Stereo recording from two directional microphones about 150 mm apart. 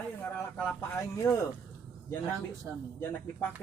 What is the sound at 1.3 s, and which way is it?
Speech, 20° left (ahead or behind).